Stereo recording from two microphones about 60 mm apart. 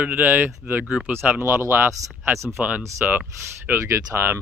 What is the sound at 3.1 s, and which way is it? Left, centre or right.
Speech, right.